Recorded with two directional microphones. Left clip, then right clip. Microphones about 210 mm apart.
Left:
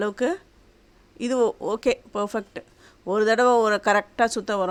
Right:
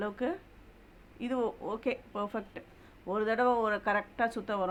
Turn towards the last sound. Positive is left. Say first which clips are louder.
# left 9 dB
turn(degrees=40)  # may be behind; listen again after turning